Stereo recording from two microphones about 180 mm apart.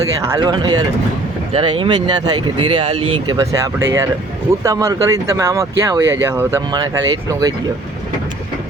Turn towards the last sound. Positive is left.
turn(degrees=-20)  # may be behind; listen again after turning